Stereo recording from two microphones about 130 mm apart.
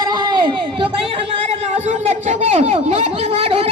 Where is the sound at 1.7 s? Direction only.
65° right (ahead or behind).